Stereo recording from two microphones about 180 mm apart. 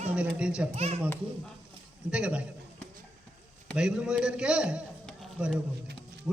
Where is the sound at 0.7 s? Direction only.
35° right (ahead or behind).